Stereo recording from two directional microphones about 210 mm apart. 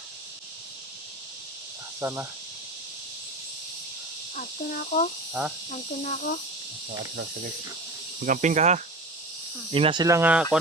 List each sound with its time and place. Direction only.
2.0 s speech: 10° right (ahead or behind)
4.4 s speech: 40° left (ahead or behind)
5.4 s speech: 5° right (ahead or behind)
5.7 s speech: 35° left (ahead or behind)
8.2 s speech: 35° right (ahead or behind); by 10.4 s 10° right (ahead or behind)